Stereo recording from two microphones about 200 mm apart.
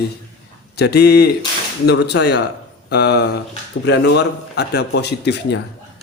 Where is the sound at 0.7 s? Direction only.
55° left (ahead or behind).